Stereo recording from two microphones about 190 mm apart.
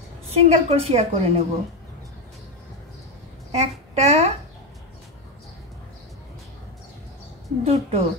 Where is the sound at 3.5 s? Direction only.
35° right (ahead or behind).